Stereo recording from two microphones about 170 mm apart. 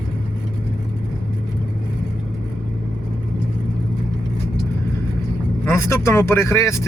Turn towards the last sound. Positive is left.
turn(degrees=15)  # may be behind; listen again after turning